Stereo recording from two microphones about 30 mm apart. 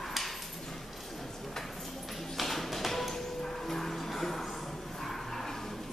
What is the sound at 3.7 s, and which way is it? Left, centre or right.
Music, centre.